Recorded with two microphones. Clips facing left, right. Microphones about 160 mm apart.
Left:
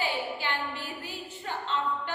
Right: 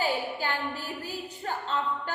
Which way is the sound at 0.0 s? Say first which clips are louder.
Right 2 dB; 40° right (ahead or behind).